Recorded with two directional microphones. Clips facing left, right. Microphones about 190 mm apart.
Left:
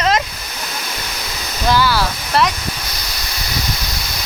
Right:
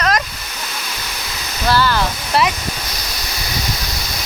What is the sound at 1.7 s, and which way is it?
Speech, 10° left (ahead or behind).